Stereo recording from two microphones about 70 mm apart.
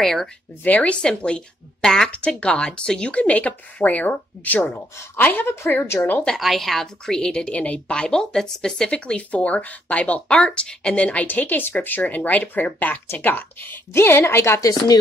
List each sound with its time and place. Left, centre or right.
0.0 s speech: centre
0.7 s a woman's voice: centre
6.2 s a woman's voice: centre; by 14.6 s left